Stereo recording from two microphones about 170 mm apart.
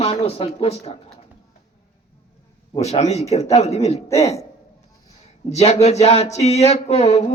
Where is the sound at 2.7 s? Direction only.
40° left (ahead or behind).